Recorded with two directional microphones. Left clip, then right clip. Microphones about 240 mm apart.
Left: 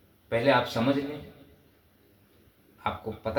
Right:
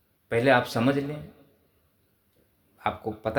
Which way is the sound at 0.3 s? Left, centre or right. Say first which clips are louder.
Right 2 dB; right.